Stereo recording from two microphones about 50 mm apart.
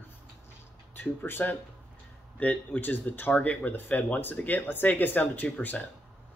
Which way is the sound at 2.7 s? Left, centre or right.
Left.